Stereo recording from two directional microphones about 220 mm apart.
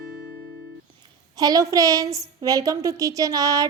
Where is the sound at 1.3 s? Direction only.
15° right (ahead or behind).